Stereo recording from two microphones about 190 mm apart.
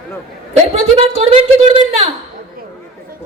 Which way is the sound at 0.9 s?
30° right (ahead or behind).